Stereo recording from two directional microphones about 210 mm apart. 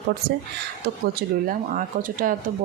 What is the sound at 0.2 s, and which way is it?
Speech, 50° right (ahead or behind).